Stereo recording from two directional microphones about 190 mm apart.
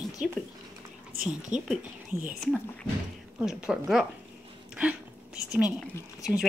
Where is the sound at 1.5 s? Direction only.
40° right (ahead or behind).